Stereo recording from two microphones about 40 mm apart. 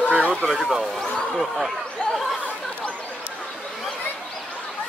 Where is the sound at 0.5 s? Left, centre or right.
Centre.